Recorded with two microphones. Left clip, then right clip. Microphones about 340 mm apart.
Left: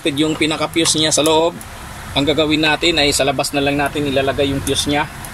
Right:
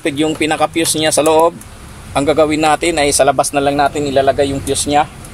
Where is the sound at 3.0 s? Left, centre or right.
Right.